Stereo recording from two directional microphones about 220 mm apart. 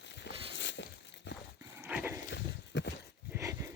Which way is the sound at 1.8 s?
10° right (ahead or behind).